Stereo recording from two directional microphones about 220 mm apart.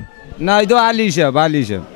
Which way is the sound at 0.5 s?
10° left (ahead or behind).